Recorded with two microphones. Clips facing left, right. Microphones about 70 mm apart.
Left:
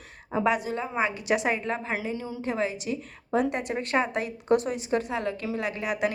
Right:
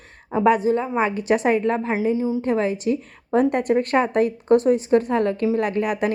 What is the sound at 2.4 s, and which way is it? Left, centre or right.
A woman's voice, right.